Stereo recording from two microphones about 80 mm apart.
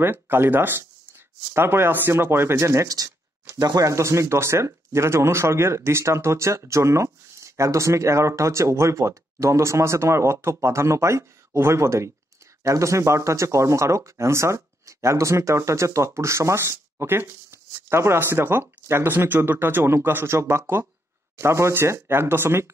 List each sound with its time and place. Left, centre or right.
0.0 s speech: right